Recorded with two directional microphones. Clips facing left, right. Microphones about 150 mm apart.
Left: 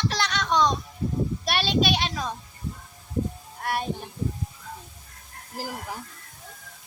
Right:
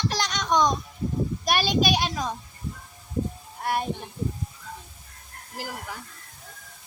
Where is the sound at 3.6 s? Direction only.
15° right (ahead or behind).